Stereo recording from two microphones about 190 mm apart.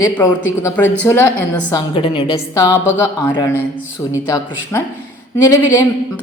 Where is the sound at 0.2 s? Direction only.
10° left (ahead or behind).